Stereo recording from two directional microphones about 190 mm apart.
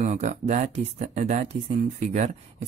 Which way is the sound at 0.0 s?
40° right (ahead or behind).